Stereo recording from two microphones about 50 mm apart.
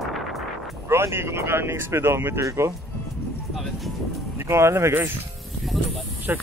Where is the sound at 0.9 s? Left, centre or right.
Right.